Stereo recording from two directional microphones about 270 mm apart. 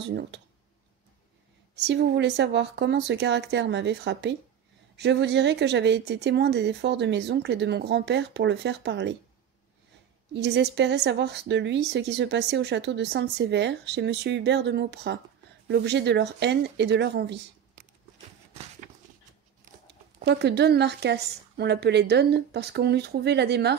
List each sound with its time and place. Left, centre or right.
0.0 s speech: right
1.8 s speech: right
10.3 s speech: right
20.2 s speech: right